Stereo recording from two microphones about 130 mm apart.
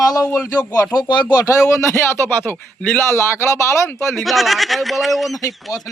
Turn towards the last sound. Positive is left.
turn(degrees=25)  # may be behind; listen again after turning